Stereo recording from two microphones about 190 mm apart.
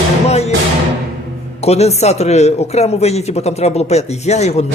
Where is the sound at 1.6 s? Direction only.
35° left (ahead or behind).